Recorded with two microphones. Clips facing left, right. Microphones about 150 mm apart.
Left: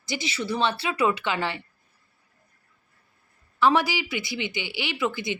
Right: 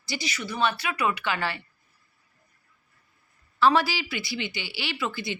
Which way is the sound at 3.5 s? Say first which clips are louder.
Even; 20° left (ahead or behind).